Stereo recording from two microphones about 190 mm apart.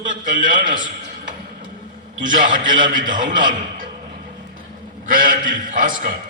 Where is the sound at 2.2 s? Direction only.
45° right (ahead or behind).